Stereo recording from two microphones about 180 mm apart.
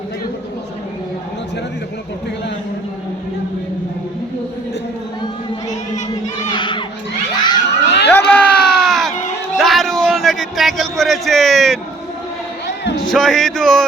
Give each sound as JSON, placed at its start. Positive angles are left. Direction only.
{"t": 6.5, "sound": "crowd", "side_deg": 25}
{"t": 7.3, "sound": "children shouting", "side_deg": 25}
{"t": 7.9, "sound": "a sound", "side_deg": 70}
{"t": 8.3, "sound": "baby cry", "side_deg": 10}
{"t": 9.6, "sound": "a sound", "side_deg": 0}
{"t": 13.1, "sound": "speech", "side_deg": 0}